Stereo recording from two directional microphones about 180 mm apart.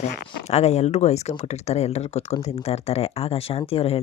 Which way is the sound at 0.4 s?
40° left (ahead or behind).